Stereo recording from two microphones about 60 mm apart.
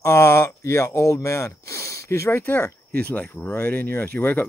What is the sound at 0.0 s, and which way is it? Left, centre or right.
Speech, left.